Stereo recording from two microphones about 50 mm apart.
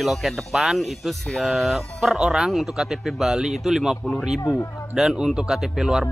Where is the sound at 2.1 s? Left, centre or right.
Centre.